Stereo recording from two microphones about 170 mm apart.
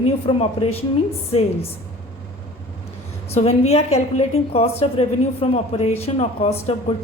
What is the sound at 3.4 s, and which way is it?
A woman's voice, 40° left (ahead or behind).